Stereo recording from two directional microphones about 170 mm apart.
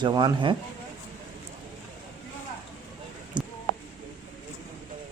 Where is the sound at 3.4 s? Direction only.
25° right (ahead or behind).